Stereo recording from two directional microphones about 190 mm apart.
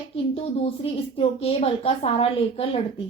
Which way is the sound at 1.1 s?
30° left (ahead or behind).